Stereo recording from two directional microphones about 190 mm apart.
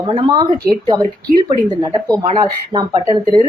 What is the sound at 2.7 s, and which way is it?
Speech, 20° right (ahead or behind).